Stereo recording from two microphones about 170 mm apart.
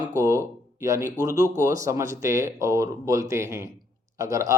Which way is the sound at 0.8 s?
20° right (ahead or behind).